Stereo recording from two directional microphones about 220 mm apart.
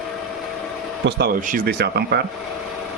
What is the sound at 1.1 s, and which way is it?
Speech, 45° right (ahead or behind).